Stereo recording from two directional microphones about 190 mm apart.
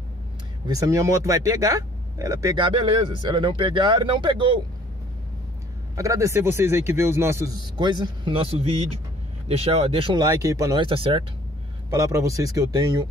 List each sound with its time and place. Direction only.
0.7 s speech: 15° right (ahead or behind)
5.9 s a man's voice: 15° right (ahead or behind)
11.9 s a man's voice: 15° right (ahead or behind)